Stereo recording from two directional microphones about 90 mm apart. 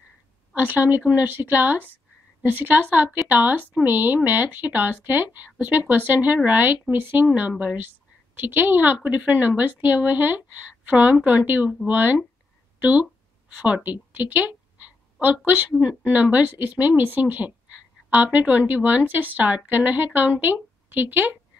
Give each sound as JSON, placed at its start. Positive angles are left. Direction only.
{"t": 0.6, "sound": "speech", "side_deg": -20}
{"t": 12.7, "sound": "a sound", "side_deg": -15}
{"t": 13.8, "sound": "a woman's voice", "side_deg": -20}